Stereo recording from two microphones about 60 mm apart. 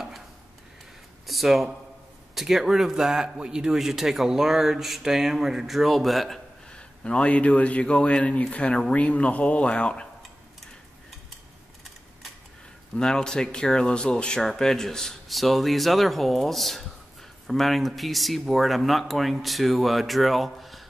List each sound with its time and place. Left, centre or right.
1.2 s a man's voice: centre
6.7 s speech: centre
12.9 s a man's voice: centre